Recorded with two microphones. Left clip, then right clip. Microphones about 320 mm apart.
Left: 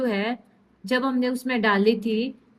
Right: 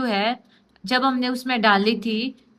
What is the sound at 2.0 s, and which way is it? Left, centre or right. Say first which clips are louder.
Speech: even; right.